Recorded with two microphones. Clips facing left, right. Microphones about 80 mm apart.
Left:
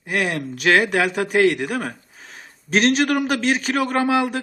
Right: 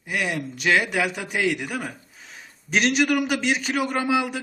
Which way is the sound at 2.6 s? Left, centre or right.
Left.